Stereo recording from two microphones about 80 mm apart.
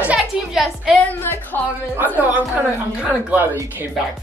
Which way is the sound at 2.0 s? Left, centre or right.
Right.